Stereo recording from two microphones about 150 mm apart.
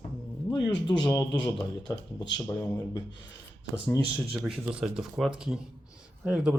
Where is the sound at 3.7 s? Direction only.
20° left (ahead or behind).